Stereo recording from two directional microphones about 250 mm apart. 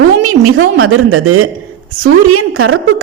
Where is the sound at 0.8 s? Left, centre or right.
Right.